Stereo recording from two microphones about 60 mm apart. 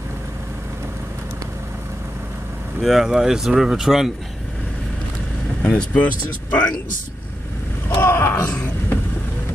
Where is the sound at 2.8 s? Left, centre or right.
Centre.